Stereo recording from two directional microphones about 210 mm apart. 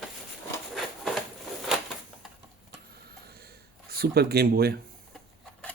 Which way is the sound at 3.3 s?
45° right (ahead or behind).